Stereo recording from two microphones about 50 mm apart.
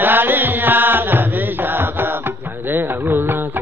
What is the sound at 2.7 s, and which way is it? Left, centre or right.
Carnatic music, right.